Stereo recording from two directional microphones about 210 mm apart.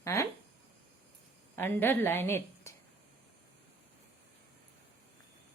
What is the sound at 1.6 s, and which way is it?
A woman's voice, 10° left (ahead or behind).